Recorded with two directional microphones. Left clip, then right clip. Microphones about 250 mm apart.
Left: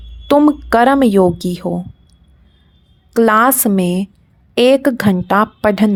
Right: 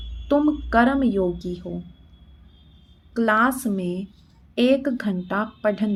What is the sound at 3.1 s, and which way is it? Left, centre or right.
A woman's voice, left.